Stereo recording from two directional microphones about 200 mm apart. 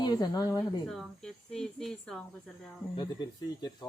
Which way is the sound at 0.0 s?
20° left (ahead or behind).